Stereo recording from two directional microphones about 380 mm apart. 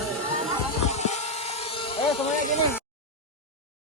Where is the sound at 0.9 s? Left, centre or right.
Centre.